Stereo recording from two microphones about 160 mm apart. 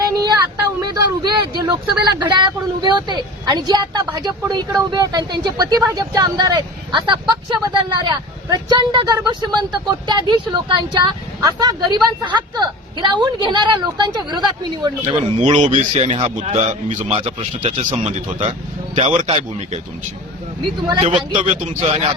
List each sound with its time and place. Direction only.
0.0 s a sound: 25° right (ahead or behind)
0.9 s speech: 25° right (ahead or behind)
15.4 s speech: 50° right (ahead or behind)
17.2 s speech: 35° right (ahead or behind)
20.8 s speech: 30° right (ahead or behind)
21.4 s speech: 50° right (ahead or behind)